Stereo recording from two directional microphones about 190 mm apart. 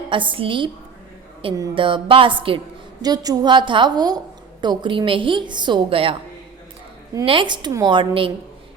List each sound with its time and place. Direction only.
0.1 s a woman's voice: 25° right (ahead or behind)
7.3 s a woman's voice: 25° right (ahead or behind)